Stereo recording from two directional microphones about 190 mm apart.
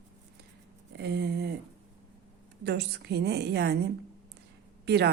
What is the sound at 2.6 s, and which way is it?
A woman's voice, 60° right (ahead or behind).